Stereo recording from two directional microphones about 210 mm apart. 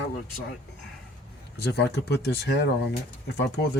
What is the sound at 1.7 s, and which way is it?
Speech, 50° left (ahead or behind).